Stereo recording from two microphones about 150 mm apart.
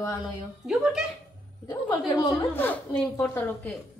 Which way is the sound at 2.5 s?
10° left (ahead or behind).